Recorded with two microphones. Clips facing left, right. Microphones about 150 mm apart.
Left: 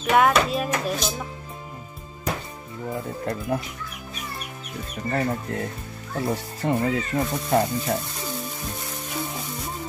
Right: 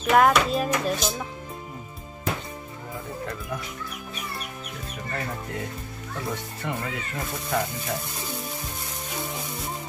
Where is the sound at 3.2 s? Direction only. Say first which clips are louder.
Left 10 dB; 35° left (ahead or behind).